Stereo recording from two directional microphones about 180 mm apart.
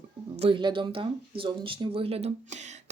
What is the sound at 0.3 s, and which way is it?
Speech, 30° right (ahead or behind).